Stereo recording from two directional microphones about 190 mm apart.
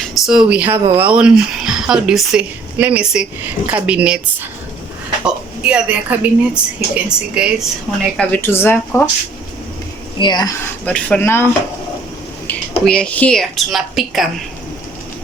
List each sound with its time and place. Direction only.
0.0 s speech: centre (ahead or behind)
5.2 s speech: 5° right (ahead or behind)
8.3 s speech: 10° left (ahead or behind)
10.2 s speech: 20° left (ahead or behind)
10.8 s speech: 5° left (ahead or behind)
12.5 s speech: 5° left (ahead or behind)